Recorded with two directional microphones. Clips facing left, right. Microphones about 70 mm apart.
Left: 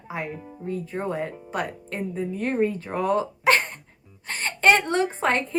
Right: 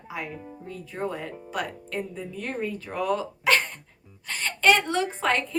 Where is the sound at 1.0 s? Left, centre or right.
Left.